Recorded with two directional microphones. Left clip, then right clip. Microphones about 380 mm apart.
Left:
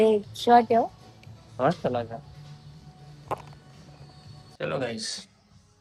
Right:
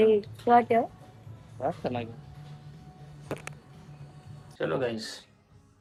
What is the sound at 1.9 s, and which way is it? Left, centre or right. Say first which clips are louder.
Speech: left 5 dB; centre.